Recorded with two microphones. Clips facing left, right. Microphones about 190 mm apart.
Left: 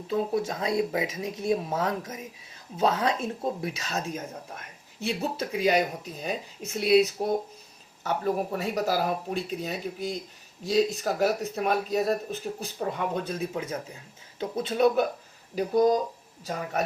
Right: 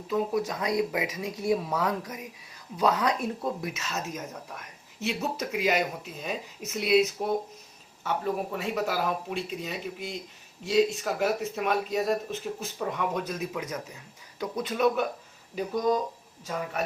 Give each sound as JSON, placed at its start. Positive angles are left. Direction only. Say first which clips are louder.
{"t": 0.1, "sound": "speech", "louder": "even", "side_deg": 30}